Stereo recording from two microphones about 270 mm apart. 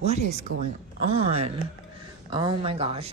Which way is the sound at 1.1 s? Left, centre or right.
Right.